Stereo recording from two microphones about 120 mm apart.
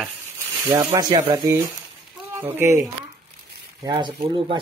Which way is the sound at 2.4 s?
20° right (ahead or behind).